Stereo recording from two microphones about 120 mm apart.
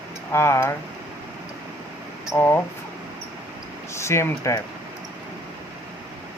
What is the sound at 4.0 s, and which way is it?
Speech, 25° left (ahead or behind).